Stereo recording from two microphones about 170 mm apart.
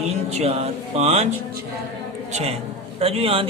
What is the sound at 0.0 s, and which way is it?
Speech, 40° right (ahead or behind).